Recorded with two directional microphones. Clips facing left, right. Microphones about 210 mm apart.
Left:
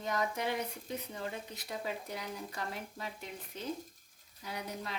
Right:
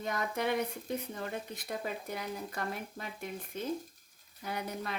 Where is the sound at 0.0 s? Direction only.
55° right (ahead or behind).